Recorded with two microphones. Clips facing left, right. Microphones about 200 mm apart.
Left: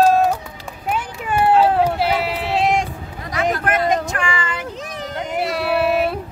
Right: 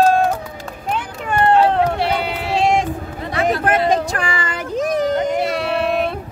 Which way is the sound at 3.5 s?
30° right (ahead or behind).